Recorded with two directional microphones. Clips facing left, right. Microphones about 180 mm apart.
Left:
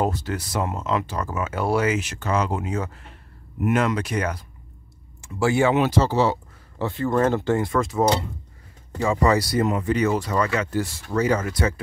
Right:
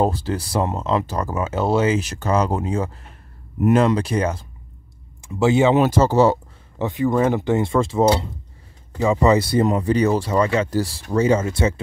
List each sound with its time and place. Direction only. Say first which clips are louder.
0.0 s speech: right 4 dB; 30° right (ahead or behind)
5.8 s speech: right 4 dB; 45° right (ahead or behind)
6.8 s speech: right 2 dB; 15° right (ahead or behind)
9.0 s speech: right 4 dB; 20° right (ahead or behind)